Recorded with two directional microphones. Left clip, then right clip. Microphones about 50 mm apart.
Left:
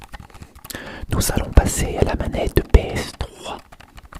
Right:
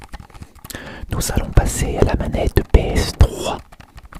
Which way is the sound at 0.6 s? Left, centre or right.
Centre.